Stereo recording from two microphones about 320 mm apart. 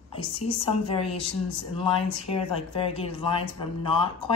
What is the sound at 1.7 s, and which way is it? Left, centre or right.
Speech, centre.